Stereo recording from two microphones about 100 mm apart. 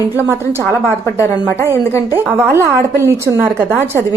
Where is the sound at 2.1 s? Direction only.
25° right (ahead or behind).